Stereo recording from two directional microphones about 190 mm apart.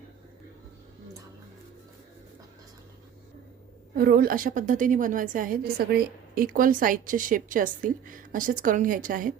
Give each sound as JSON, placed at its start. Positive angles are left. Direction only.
{"t": 3.9, "sound": "a woman's voice", "side_deg": -50}